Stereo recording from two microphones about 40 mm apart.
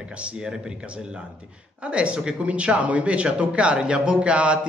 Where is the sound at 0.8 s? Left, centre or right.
Right.